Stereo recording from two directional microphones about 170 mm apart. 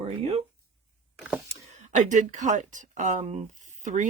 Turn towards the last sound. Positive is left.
turn(degrees=-45)  # may be behind; listen again after turning